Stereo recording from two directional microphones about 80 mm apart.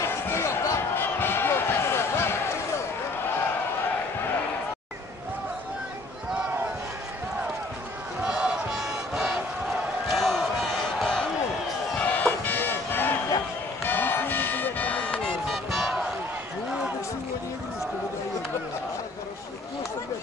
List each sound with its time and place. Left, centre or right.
0.0 s basketball bounce: left
8.2 s crowd: centre
10.1 s a sound: centre
12.0 s music: centre
13.8 s run: left
15.4 s music: centre